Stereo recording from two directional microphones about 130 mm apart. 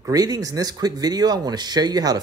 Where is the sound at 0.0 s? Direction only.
30° right (ahead or behind).